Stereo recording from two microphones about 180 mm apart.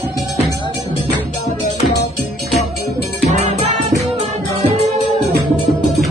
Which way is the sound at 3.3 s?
40° right (ahead or behind).